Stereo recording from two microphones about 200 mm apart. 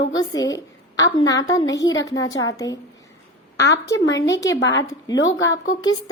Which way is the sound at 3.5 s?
60° left (ahead or behind).